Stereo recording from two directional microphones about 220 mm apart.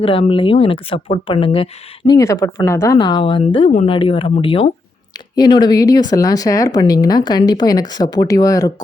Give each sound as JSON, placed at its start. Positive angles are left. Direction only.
{"t": 0.0, "sound": "speech", "side_deg": 25}